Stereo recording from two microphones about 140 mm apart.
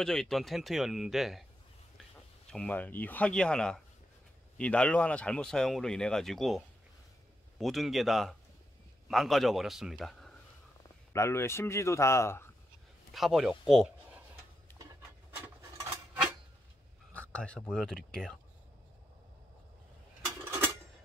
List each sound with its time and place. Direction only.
0.0 s speech: 5° left (ahead or behind)
2.5 s speech: 10° left (ahead or behind)
11.1 s speech: 20° left (ahead or behind)
13.1 s speech: centre (ahead or behind)
17.1 s speech: 10° left (ahead or behind)